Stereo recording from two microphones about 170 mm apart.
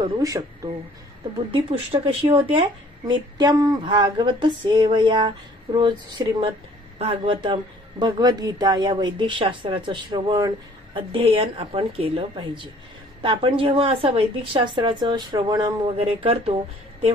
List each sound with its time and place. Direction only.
0.0 s speech: 20° right (ahead or behind)
1.5 s speech: 30° right (ahead or behind)